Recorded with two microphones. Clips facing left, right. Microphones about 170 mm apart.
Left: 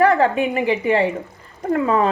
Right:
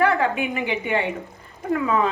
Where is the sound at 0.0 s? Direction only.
40° left (ahead or behind).